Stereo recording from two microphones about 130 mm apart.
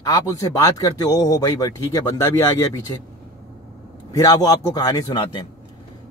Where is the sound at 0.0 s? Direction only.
25° left (ahead or behind).